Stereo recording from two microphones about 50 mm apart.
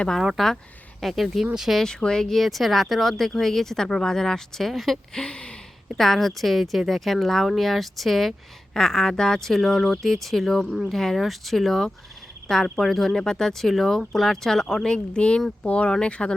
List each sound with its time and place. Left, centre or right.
0.3 s speech: centre
1.7 s speech: centre
5.1 s a sound: centre
6.0 s speech: centre
14.9 s speech: centre